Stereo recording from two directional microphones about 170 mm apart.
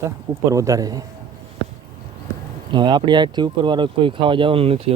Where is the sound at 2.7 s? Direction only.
25° right (ahead or behind).